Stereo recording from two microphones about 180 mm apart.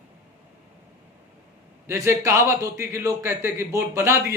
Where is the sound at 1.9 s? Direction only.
15° right (ahead or behind).